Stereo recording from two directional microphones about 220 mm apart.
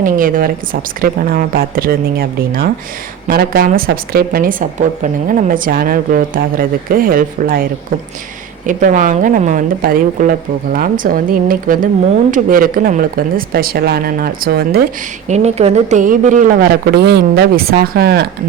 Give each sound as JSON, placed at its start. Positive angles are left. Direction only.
{"t": 0.0, "sound": "a woman's voice", "side_deg": -40}
{"t": 15.3, "sound": "a woman's voice", "side_deg": -30}